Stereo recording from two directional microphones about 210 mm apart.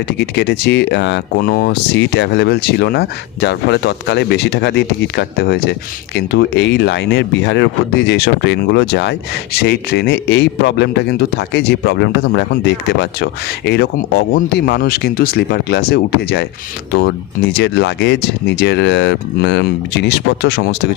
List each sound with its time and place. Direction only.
0.1 s speech: 50° left (ahead or behind)